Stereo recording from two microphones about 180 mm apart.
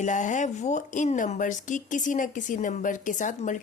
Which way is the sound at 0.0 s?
45° left (ahead or behind).